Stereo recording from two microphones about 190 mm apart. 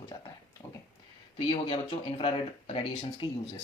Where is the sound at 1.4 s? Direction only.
25° left (ahead or behind).